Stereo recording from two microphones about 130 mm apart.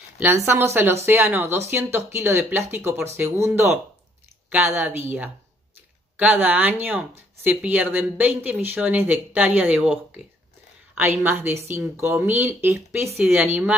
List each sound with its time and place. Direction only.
0.5 s speech: 15° right (ahead or behind)
11.2 s speech: 15° right (ahead or behind)